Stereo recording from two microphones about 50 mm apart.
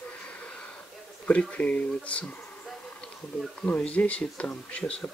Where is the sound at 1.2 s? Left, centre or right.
Left.